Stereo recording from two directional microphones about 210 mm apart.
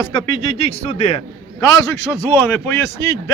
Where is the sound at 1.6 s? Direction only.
15° left (ahead or behind).